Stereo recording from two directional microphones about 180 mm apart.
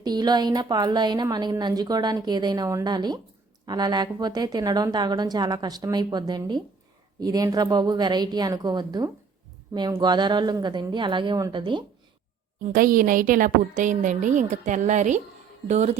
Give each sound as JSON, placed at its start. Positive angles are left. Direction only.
{"t": 0.0, "sound": "a woman's voice", "side_deg": -25}
{"t": 12.6, "sound": "a woman's voice", "side_deg": -50}